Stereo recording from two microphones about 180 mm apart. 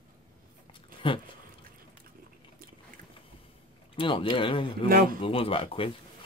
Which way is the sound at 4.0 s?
30° left (ahead or behind).